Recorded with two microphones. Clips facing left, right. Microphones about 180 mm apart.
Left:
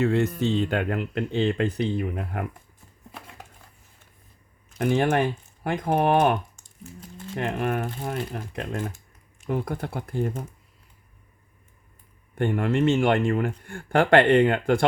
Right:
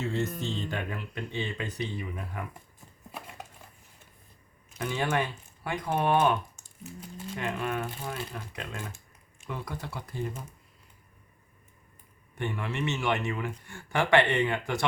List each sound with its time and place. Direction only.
0.0 s speech: 60° left (ahead or behind)
4.8 s speech: 50° left (ahead or behind)
12.4 s speech: 55° left (ahead or behind)